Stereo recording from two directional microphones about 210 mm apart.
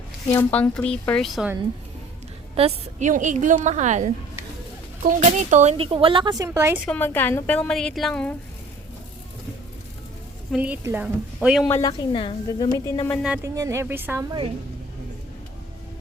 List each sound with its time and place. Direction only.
0.3 s a woman's voice: 10° left (ahead or behind)
2.6 s a woman's voice: 30° right (ahead or behind); by 6.8 s 15° right (ahead or behind)
6.8 s a woman's voice: 10° left (ahead or behind)
10.5 s a woman's voice: 5° right (ahead or behind)
11.7 s a woman's voice: 15° left (ahead or behind)
13.2 s a woman's voice: 5° right (ahead or behind)